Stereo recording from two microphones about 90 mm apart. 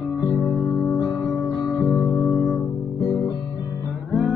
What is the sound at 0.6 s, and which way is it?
Music, 5° right (ahead or behind).